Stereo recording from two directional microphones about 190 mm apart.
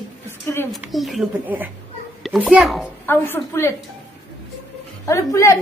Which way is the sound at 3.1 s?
10° left (ahead or behind).